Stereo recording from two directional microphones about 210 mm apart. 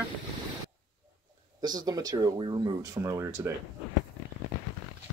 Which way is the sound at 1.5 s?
20° right (ahead or behind).